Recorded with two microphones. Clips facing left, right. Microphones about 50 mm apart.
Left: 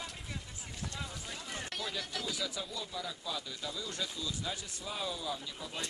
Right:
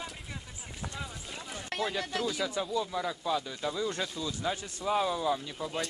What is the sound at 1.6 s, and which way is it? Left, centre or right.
Speech, right.